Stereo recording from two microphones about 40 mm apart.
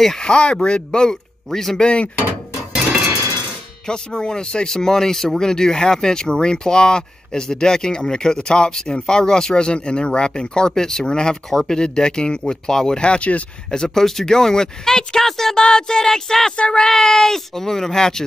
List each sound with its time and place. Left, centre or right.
0.2 s speech: left
3.8 s speech: centre
13.7 s speech: centre